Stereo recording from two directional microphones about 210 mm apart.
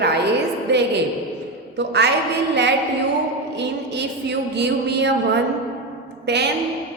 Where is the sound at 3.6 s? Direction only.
55° right (ahead or behind).